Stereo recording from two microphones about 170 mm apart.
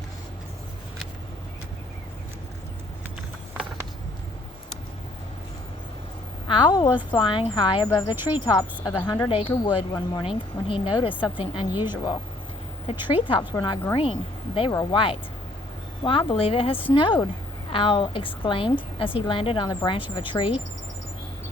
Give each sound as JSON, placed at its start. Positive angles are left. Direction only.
{"t": 6.5, "sound": "a woman's voice", "side_deg": 25}